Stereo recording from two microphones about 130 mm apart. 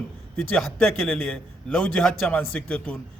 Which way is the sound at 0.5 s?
5° left (ahead or behind).